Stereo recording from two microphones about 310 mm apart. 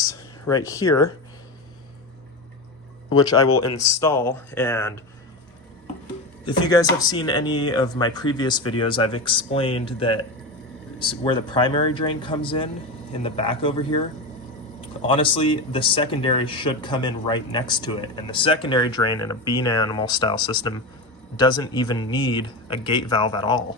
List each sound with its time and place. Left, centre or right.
0.0 s speech: centre
3.2 s speech: centre
3.4 s speech: left
3.8 s speech: centre
6.4 s speech: centre